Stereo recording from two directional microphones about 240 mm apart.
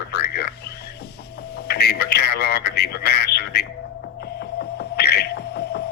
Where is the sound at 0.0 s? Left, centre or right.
Left.